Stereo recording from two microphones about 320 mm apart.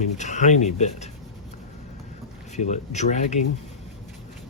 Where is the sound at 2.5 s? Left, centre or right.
Left.